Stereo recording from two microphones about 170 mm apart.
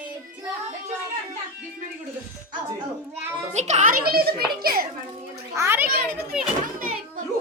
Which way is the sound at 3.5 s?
40° right (ahead or behind).